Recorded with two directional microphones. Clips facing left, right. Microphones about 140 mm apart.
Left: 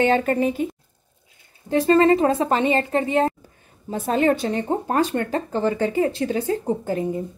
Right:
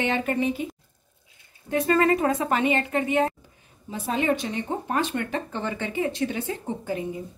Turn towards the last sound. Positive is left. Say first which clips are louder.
# left 6 dB
turn(degrees=45)  # may be behind; listen again after turning